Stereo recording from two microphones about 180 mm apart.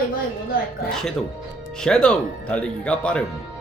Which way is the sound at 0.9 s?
Centre (ahead or behind).